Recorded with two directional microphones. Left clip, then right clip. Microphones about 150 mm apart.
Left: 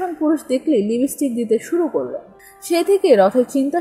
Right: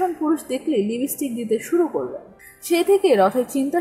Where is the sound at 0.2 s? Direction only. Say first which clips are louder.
Left 4 dB; 15° left (ahead or behind).